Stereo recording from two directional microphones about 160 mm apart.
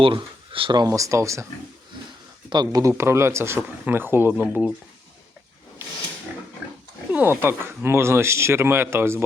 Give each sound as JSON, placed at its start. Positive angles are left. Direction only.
{"t": 0.0, "sound": "speech", "side_deg": -35}
{"t": 2.5, "sound": "speech", "side_deg": -25}
{"t": 7.1, "sound": "speech", "side_deg": -10}